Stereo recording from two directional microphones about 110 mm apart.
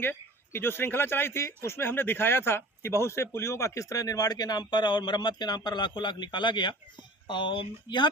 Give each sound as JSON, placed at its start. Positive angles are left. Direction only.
{"t": 0.0, "sound": "speech", "side_deg": 20}